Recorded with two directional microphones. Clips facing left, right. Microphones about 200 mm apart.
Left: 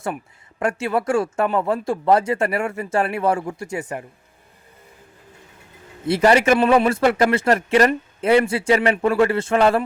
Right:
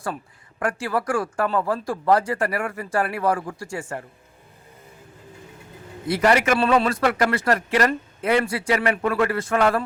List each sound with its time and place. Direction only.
0.6 s a man's voice: 25° left (ahead or behind)
6.1 s a man's voice: 25° left (ahead or behind)